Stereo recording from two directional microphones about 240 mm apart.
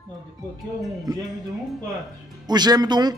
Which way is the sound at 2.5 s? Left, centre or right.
Centre.